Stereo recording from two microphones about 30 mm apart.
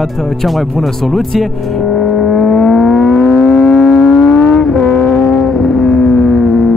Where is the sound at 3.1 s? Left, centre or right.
Centre.